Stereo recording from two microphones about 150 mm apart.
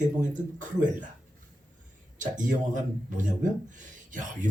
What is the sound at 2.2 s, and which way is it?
Speech, 60° right (ahead or behind).